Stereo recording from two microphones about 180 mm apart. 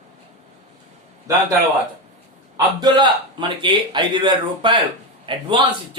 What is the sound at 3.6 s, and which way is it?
A man's voice, 25° right (ahead or behind).